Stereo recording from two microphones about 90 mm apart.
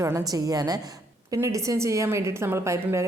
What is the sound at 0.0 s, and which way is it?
A woman's voice, 40° right (ahead or behind).